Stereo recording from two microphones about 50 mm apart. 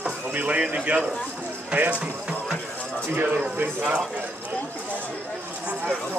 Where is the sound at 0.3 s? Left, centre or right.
Right.